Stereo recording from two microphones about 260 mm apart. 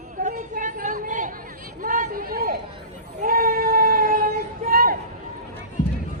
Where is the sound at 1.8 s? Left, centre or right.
Right.